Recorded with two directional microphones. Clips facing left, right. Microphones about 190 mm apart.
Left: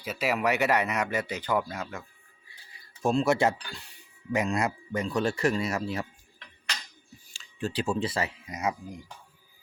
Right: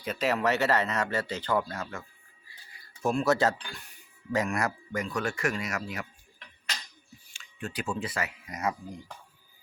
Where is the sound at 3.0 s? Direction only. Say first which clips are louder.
Left 1 dB; 25° left (ahead or behind).